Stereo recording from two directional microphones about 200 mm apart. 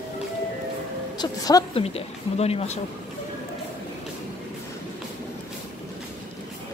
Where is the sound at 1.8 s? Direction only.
30° left (ahead or behind).